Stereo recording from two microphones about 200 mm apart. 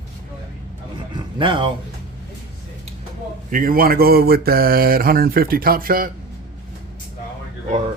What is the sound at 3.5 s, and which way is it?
Speech, 45° right (ahead or behind).